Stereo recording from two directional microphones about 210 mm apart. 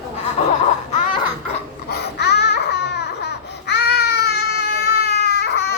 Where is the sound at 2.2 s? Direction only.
50° left (ahead or behind).